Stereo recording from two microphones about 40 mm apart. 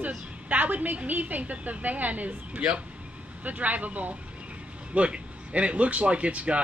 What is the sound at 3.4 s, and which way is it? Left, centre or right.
Speech, right.